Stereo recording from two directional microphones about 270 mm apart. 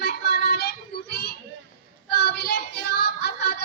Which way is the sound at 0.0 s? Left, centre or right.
Left.